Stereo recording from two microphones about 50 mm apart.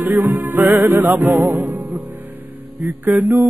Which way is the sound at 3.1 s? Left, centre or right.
Right.